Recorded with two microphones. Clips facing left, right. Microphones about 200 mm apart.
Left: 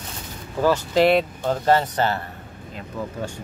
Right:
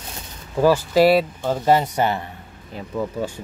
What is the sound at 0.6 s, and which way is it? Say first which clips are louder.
Speech: right 3 dB; 10° right (ahead or behind).